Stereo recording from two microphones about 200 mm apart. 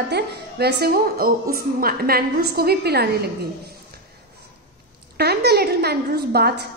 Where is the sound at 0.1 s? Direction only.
55° right (ahead or behind).